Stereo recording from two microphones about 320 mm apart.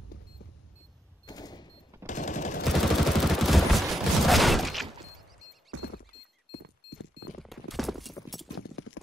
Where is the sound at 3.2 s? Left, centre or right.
Centre.